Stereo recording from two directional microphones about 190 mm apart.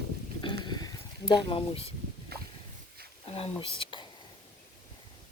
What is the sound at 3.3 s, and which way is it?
Speech, 30° left (ahead or behind).